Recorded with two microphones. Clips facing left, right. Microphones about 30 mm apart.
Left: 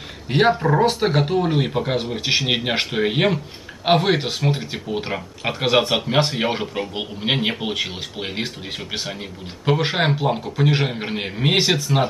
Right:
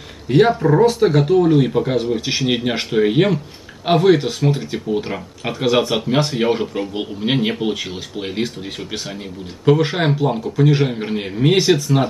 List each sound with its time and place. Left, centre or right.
0.3 s speech: centre
9.7 s speech: centre